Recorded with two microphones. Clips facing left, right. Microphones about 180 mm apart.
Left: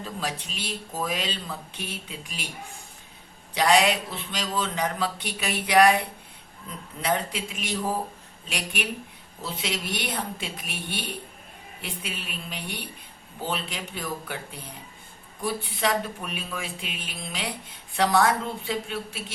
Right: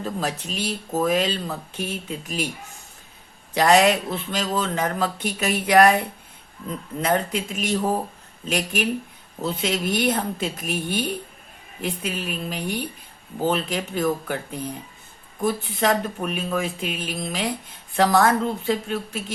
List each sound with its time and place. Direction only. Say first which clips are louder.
0.0 s speech: right 5 dB; 45° right (ahead or behind)
3.5 s speech: right 4 dB; 45° right (ahead or behind)
7.0 s speech: right 4 dB; 45° right (ahead or behind)